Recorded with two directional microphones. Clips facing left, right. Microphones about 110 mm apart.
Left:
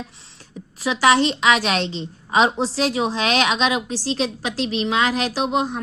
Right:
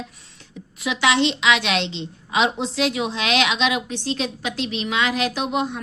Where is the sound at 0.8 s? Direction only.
35° left (ahead or behind).